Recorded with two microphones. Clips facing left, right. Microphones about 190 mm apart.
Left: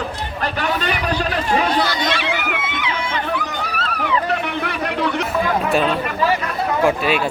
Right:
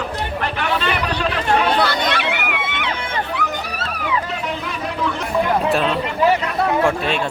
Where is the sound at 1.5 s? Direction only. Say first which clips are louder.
Right 1 dB; 60° right (ahead or behind).